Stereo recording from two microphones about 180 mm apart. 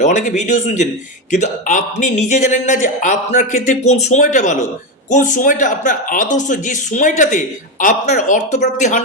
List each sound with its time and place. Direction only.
0.0 s a man's voice: 45° left (ahead or behind)